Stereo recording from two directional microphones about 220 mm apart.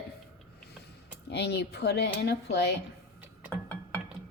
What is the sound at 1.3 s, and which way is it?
A woman's voice, 50° left (ahead or behind).